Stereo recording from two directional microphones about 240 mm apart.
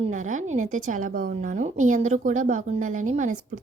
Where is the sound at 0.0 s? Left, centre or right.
Right.